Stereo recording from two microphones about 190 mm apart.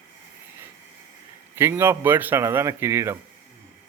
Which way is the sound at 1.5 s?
10° right (ahead or behind).